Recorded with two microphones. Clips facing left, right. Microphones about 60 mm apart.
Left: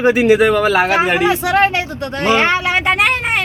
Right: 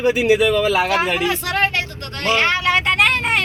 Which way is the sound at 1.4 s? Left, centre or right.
Left.